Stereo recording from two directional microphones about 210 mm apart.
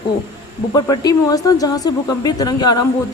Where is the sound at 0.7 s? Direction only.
20° left (ahead or behind).